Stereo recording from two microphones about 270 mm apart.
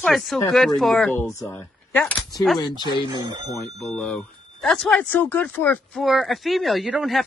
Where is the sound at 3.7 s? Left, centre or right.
Centre.